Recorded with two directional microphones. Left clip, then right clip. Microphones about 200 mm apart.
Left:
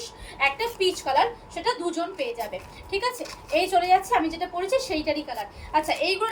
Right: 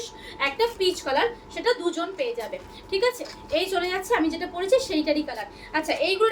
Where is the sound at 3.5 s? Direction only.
20° right (ahead or behind).